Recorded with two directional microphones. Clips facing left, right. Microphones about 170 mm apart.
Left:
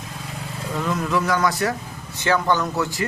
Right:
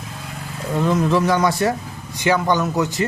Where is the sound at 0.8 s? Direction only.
25° right (ahead or behind).